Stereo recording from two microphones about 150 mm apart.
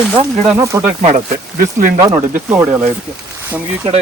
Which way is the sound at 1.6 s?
60° right (ahead or behind).